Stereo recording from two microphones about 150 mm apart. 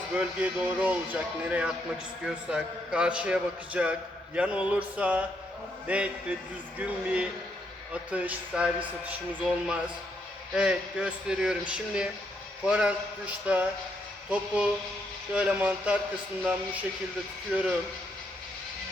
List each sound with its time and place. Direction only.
0.3 s a man's voice: 10° right (ahead or behind)
17.5 s a man's voice: 5° right (ahead or behind)